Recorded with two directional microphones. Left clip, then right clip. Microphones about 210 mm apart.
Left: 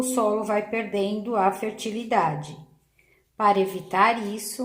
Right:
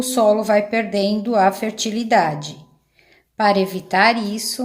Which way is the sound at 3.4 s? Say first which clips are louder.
Right 4 dB; 35° right (ahead or behind).